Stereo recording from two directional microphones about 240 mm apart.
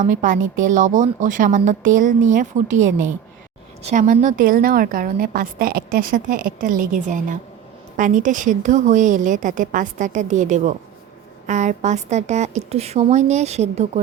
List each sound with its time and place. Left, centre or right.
0.0 s a woman's voice: right